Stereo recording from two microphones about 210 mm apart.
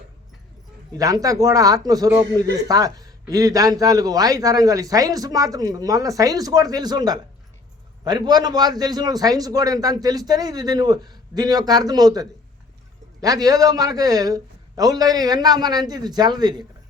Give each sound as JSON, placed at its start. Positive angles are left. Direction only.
{"t": 0.9, "sound": "a man's voice", "side_deg": -15}